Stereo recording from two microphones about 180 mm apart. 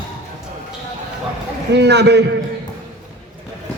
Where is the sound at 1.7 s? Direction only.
70° right (ahead or behind).